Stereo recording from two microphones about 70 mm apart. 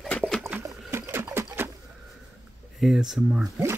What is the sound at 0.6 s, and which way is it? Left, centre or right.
Boat, right.